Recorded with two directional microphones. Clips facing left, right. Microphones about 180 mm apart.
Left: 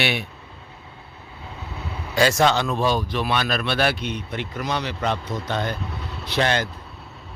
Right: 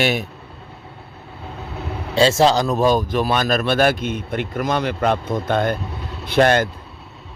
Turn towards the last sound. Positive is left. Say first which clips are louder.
# right 7 dB
turn(degrees=-50)  # may be behind; listen again after turning